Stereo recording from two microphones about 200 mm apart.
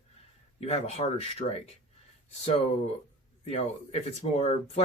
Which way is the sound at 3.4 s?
30° left (ahead or behind).